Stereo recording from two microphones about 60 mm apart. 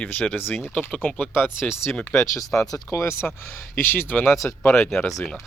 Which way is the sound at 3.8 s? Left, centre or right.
Left.